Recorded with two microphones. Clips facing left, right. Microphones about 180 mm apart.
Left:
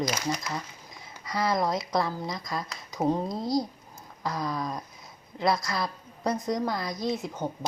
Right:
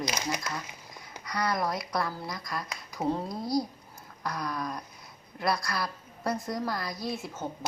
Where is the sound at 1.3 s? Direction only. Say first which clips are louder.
Left 3 dB; 25° left (ahead or behind).